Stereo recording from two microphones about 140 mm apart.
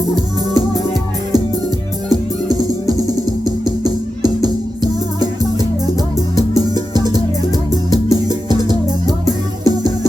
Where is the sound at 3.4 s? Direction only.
30° right (ahead or behind).